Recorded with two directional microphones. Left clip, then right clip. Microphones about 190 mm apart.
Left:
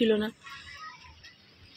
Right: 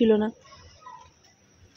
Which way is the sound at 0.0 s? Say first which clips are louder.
Right 4 dB; 25° right (ahead or behind).